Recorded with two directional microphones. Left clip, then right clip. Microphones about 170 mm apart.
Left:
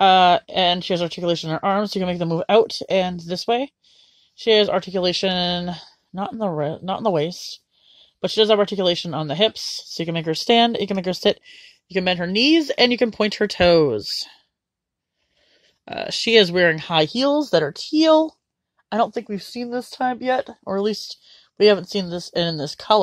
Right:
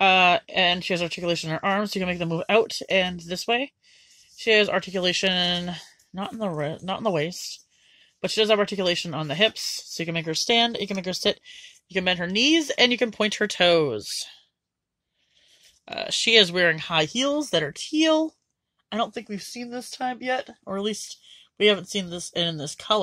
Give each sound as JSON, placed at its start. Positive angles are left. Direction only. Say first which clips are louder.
{"t": 0.0, "sound": "speech", "louder": "left 4 dB", "side_deg": 25}
{"t": 13.6, "sound": "speech", "louder": "left 5 dB", "side_deg": 40}
{"t": 15.8, "sound": "speech", "louder": "left 1 dB", "side_deg": 40}
{"t": 19.1, "sound": "speech", "louder": "left 6 dB", "side_deg": 40}